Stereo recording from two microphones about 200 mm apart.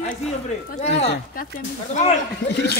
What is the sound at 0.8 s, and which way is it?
Speech, 35° left (ahead or behind).